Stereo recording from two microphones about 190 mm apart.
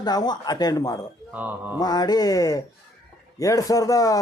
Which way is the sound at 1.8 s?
20° left (ahead or behind).